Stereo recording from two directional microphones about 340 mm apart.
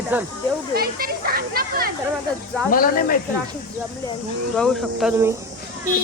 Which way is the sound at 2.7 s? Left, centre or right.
Left.